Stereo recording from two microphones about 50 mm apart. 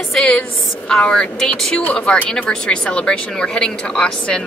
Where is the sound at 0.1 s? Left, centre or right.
Centre.